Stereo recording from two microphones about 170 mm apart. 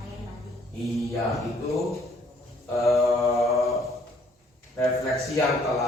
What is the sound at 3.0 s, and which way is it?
Mantra, 15° left (ahead or behind).